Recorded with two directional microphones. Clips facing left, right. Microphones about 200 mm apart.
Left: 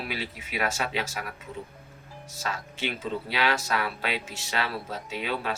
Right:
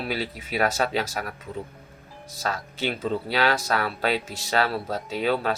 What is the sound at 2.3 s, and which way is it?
Speech, 35° right (ahead or behind).